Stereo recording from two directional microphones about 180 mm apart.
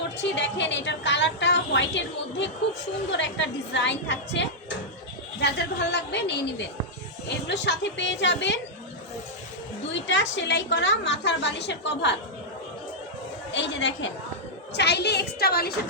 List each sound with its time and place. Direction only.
0.2 s a woman's voice: 80° left
5.4 s a woman's voice: 70° left (ahead or behind)
9.9 s a woman's voice: 85° left
13.5 s a woman's voice: 90° left
14.7 s a woman's voice: 70° left (ahead or behind)